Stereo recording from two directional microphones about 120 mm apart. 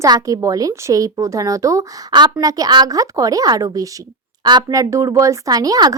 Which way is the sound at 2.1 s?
40° right (ahead or behind).